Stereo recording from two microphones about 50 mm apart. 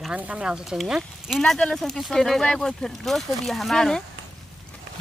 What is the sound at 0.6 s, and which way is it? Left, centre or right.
Speech, centre.